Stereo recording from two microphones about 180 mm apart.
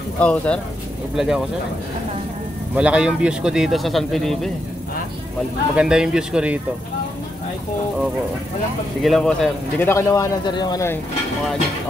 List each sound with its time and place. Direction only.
0.2 s a man's voice: 5° left (ahead or behind)
2.7 s speech: 5° right (ahead or behind)
5.8 s speech: 5° right (ahead or behind)
9.0 s speech: centre (ahead or behind)
9.8 s a man's voice: 15° left (ahead or behind)